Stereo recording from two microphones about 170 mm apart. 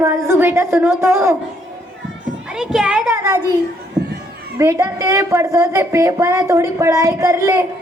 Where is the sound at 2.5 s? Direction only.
5° right (ahead or behind).